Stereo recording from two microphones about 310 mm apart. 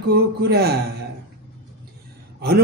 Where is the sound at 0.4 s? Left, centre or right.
Right.